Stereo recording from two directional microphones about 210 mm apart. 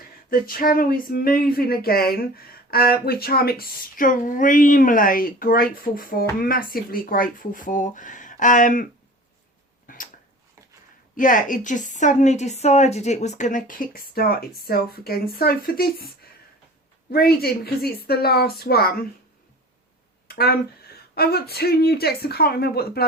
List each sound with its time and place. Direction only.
0.3 s a woman's voice: 45° left (ahead or behind)
9.8 s a sound: 40° left (ahead or behind)
11.2 s a woman's voice: 40° left (ahead or behind)
17.1 s speech: 45° left (ahead or behind)
20.2 s a sound: 45° left (ahead or behind)
21.2 s speech: 50° left (ahead or behind)